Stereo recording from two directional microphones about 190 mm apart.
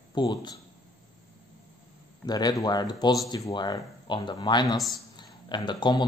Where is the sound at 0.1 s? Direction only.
25° left (ahead or behind).